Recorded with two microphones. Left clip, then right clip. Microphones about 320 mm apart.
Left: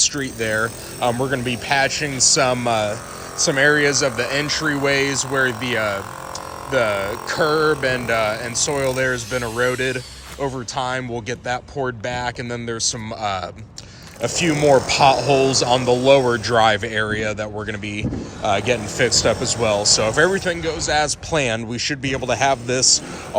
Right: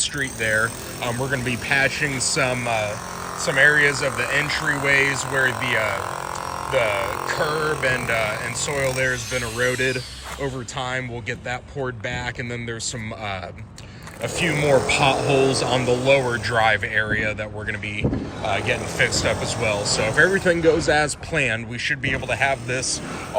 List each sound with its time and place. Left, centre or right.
0.0 s speech: centre
7.8 s speech: centre
14.2 s speech: centre